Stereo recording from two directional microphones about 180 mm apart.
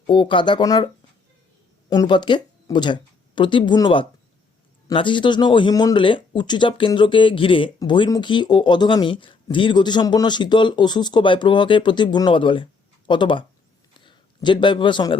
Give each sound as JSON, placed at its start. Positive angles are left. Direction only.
{"t": 0.1, "sound": "speech", "side_deg": 25}
{"t": 1.9, "sound": "a man's voice", "side_deg": 25}